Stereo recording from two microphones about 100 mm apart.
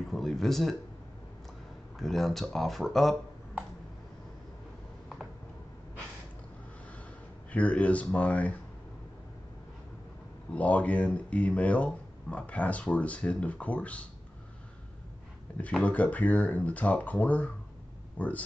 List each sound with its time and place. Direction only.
0.1 s speech: 5° left (ahead or behind)
2.0 s speech: centre (ahead or behind)
7.5 s speech: 15° left (ahead or behind)
10.5 s speech: 15° left (ahead or behind)
15.8 s speech: 15° left (ahead or behind)